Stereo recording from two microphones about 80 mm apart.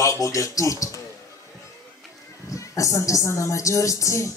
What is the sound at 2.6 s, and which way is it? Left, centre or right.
Speech, left.